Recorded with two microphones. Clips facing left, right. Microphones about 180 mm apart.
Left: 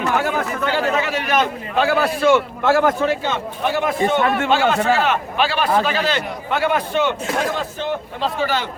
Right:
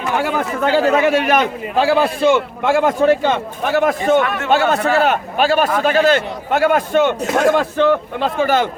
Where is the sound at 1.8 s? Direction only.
25° right (ahead or behind).